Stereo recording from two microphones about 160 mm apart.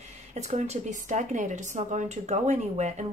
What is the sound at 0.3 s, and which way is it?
A woman's voice, 45° right (ahead or behind).